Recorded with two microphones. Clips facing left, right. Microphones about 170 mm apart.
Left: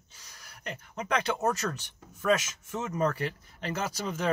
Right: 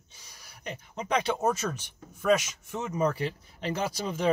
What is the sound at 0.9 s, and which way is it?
Speech, 10° right (ahead or behind).